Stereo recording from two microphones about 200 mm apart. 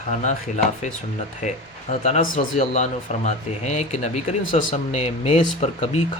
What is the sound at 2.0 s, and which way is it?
Speech, 40° left (ahead or behind).